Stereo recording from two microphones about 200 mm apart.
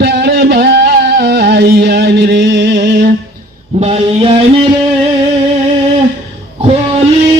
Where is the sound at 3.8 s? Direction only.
30° right (ahead or behind).